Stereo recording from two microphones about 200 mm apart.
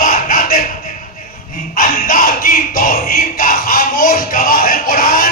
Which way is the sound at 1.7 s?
45° left (ahead or behind).